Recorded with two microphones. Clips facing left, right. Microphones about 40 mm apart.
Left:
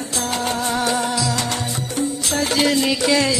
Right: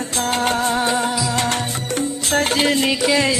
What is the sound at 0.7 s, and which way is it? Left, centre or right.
Music, right.